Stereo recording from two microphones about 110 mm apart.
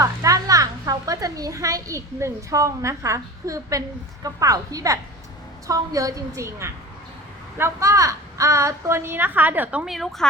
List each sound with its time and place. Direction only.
0.0 s a woman's voice: 30° right (ahead or behind)
9.8 s speech: centre (ahead or behind)